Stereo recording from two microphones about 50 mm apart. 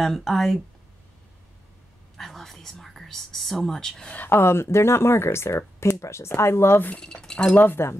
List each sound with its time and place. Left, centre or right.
0.0 s speech: centre
2.1 s speech: centre
4.3 s speech: left
5.9 s speech: left
7.0 s speech: centre
7.5 s speech: left